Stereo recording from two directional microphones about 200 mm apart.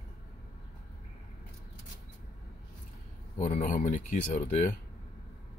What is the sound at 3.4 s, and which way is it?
Speech, 40° left (ahead or behind).